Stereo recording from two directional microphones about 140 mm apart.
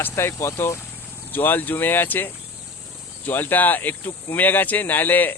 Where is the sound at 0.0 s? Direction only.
15° left (ahead or behind).